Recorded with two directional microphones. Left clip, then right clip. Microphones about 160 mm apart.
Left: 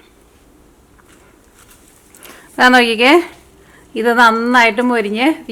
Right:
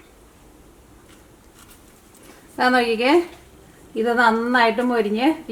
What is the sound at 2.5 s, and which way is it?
A woman's voice, 30° left (ahead or behind).